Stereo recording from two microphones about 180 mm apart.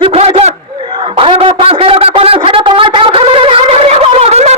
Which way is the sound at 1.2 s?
30° right (ahead or behind).